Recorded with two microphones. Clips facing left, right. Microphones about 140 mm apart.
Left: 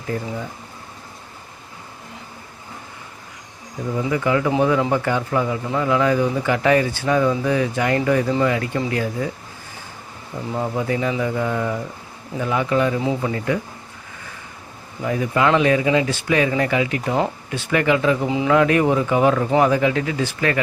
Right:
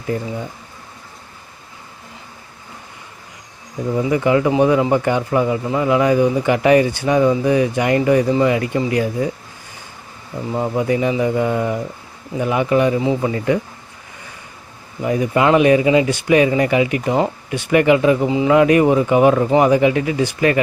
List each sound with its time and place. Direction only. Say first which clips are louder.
3.9 s speech: right 4 dB; 20° right (ahead or behind)
10.5 s speech: right 4 dB; 15° right (ahead or behind)
15.0 s speech: right 3 dB; 20° right (ahead or behind)